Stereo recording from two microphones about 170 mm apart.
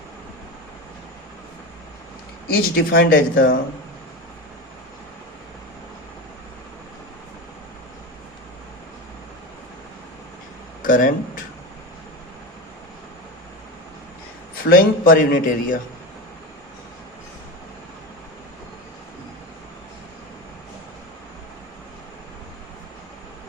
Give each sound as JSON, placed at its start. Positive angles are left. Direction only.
{"t": 2.6, "sound": "a man's voice", "side_deg": 60}
{"t": 10.8, "sound": "speech", "side_deg": 50}
{"t": 14.6, "sound": "a man's voice", "side_deg": 60}